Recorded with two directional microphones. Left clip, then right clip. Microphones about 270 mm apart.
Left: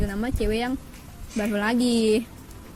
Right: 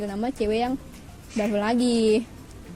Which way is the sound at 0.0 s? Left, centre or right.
Left.